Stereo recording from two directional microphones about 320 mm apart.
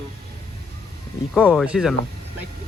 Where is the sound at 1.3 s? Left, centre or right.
Centre.